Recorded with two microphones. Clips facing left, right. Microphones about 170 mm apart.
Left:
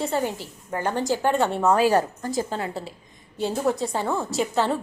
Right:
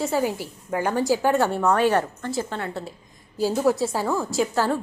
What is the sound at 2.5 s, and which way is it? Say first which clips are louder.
Speech: left 1 dB; 35° left (ahead or behind).